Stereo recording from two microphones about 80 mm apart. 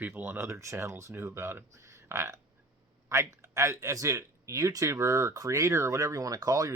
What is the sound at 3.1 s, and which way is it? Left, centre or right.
Speech, right.